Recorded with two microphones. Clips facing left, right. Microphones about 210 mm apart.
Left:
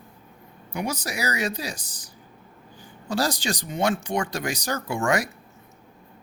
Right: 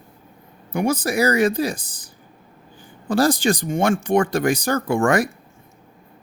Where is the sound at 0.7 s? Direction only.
55° right (ahead or behind).